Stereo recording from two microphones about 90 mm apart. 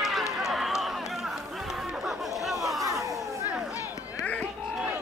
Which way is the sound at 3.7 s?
40° left (ahead or behind).